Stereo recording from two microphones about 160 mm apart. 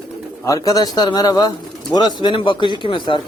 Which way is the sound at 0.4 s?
20° left (ahead or behind).